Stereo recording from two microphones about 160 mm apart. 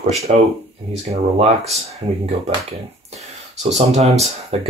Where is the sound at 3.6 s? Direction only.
45° right (ahead or behind).